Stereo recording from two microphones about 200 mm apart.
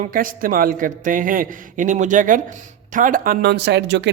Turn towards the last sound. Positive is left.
turn(degrees=-60)  # may be behind; listen again after turning